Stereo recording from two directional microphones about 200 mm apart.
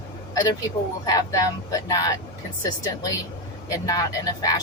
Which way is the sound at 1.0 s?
20° left (ahead or behind).